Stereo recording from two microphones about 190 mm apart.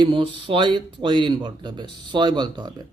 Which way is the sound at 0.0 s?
25° right (ahead or behind).